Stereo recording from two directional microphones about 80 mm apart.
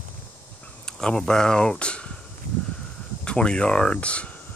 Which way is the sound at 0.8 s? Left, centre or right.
Centre.